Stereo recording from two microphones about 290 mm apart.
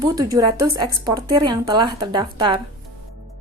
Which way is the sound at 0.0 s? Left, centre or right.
Centre.